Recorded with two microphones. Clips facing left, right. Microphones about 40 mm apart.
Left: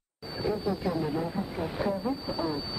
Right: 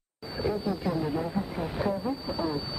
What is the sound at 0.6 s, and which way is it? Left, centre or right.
Speech, centre.